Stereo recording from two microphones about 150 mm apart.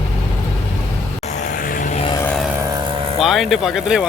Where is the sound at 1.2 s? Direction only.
55° left (ahead or behind).